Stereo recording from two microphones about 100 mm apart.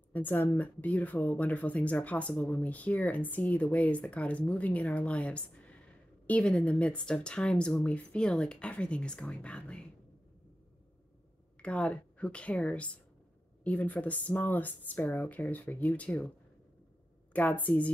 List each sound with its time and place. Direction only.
0.1 s speech: 20° left (ahead or behind)
11.6 s speech: 10° left (ahead or behind)
17.3 s speech: 15° left (ahead or behind)